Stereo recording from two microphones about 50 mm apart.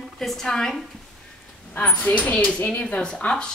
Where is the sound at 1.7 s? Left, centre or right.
Left.